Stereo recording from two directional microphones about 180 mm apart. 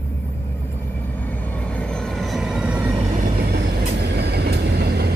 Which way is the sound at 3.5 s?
65° right (ahead or behind).